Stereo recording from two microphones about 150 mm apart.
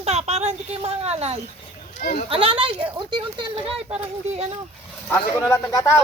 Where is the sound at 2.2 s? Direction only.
35° right (ahead or behind).